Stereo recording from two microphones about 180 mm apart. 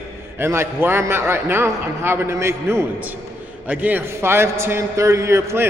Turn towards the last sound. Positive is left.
turn(degrees=-15)  # may be behind; listen again after turning